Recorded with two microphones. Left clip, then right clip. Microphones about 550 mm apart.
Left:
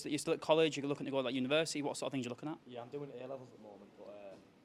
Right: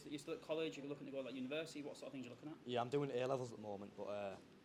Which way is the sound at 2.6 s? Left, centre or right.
Right.